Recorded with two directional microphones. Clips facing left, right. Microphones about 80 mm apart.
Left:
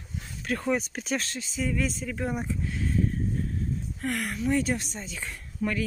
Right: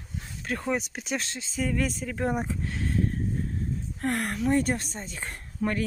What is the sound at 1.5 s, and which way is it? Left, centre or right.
Speech, right.